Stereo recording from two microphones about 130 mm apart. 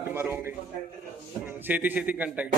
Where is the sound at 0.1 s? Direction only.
15° right (ahead or behind).